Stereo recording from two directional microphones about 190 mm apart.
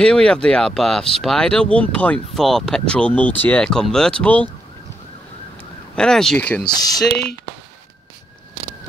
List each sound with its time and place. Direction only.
0.0 s speech: 5° left (ahead or behind)
5.9 s speech: 5° left (ahead or behind)
7.1 s speech: 60° left (ahead or behind)